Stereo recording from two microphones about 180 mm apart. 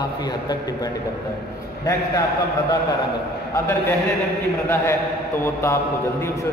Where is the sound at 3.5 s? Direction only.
15° left (ahead or behind).